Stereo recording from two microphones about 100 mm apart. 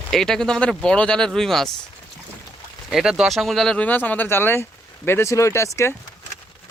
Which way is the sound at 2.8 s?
5° right (ahead or behind).